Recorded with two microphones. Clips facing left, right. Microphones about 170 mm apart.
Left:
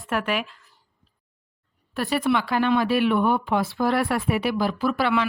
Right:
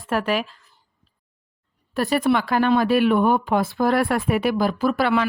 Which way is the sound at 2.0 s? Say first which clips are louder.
Right 3 dB; 40° right (ahead or behind).